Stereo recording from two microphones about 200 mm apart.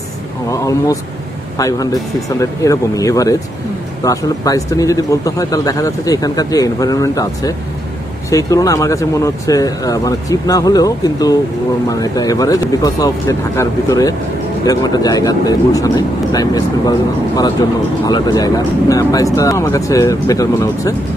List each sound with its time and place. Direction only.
0.5 s speech: 15° left (ahead or behind)